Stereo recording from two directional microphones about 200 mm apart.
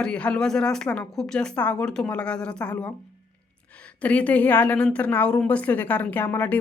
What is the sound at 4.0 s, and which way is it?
A woman's voice, 5° left (ahead or behind).